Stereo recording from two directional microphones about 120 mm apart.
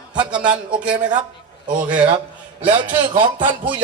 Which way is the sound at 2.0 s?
45° right (ahead or behind).